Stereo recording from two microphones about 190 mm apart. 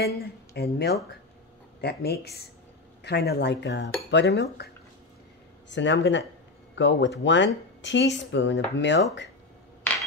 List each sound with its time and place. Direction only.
0.0 s cutlery: 55° left (ahead or behind)
5.7 s speech: 70° left (ahead or behind)